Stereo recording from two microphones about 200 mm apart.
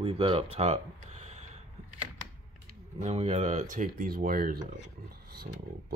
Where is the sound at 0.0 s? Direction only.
30° right (ahead or behind).